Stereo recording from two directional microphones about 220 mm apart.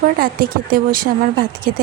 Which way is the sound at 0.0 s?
40° right (ahead or behind).